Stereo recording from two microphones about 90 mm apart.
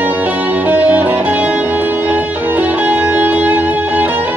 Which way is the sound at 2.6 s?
20° right (ahead or behind).